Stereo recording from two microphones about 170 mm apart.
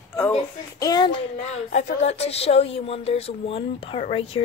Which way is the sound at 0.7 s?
20° left (ahead or behind).